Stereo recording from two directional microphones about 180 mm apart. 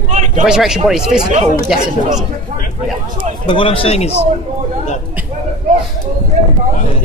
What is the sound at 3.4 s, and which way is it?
Speech, 30° left (ahead or behind).